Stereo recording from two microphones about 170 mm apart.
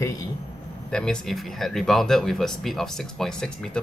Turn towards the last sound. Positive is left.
turn(degrees=5)  # may be behind; listen again after turning